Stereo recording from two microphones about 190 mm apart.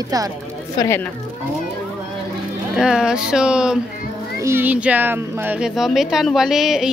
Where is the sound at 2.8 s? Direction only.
5° right (ahead or behind).